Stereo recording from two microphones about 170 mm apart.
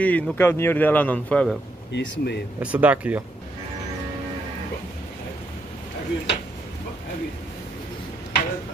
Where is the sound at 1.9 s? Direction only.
90° left.